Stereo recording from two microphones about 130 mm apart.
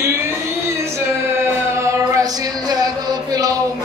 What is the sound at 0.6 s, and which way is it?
Music, 20° right (ahead or behind).